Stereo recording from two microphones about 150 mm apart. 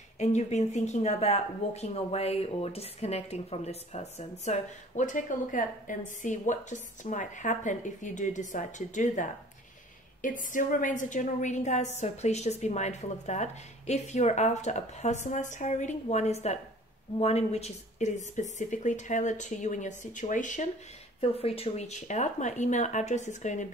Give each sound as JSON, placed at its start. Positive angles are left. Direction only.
{"t": 0.2, "sound": "speech", "side_deg": 50}
{"t": 21.2, "sound": "speech", "side_deg": 40}